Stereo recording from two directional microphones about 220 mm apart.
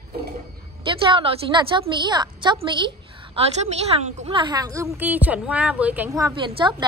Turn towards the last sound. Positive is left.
turn(degrees=-20)  # may be behind; listen again after turning